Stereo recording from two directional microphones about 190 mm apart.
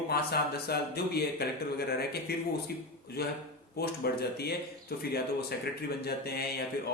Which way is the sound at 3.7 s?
55° left (ahead or behind).